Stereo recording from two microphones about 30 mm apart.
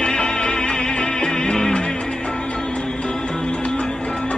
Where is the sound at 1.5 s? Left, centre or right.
Left.